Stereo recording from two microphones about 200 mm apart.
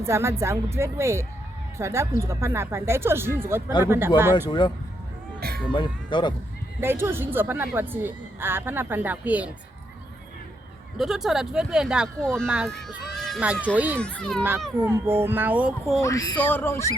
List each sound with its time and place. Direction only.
0.0 s a woman's voice: 15° right (ahead or behind)
4.4 s speech: 25° left (ahead or behind)
5.7 s speech: 25° left (ahead or behind)
6.7 s a woman's voice: 10° right (ahead or behind)
10.9 s a woman's voice: centre (ahead or behind)
14.0 s speech: 5° left (ahead or behind)
14.8 s a woman's voice: 10° right (ahead or behind)
16.0 s speech: 15° left (ahead or behind)